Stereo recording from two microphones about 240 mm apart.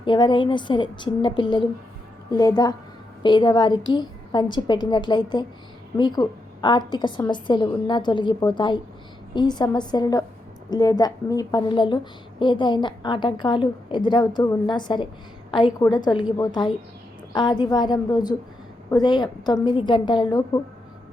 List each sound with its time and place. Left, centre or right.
0.0 s a woman's voice: centre